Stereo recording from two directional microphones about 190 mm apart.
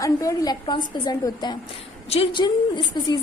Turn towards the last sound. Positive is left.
turn(degrees=25)  # may be behind; listen again after turning